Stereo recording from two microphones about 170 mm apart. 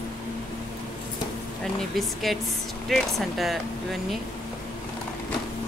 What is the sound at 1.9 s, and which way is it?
Speech, centre (ahead or behind).